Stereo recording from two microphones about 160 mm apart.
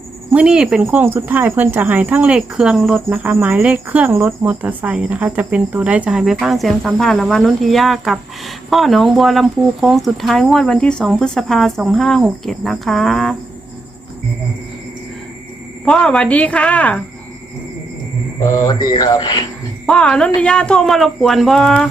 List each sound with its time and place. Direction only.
0.3 s speech: 5° right (ahead or behind)
15.8 s speech: 5° left (ahead or behind)
18.3 s speech: 20° left (ahead or behind)
19.9 s speech: 5° left (ahead or behind)